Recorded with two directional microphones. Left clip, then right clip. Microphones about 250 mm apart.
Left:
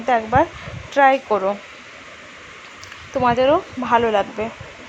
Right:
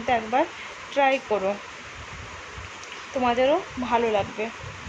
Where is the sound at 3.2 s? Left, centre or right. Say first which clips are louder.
Left 5 dB; centre.